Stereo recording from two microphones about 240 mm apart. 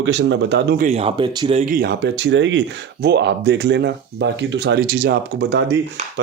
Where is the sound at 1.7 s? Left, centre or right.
Right.